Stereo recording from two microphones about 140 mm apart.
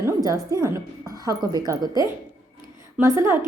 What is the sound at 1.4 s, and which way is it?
A woman's voice, 30° right (ahead or behind).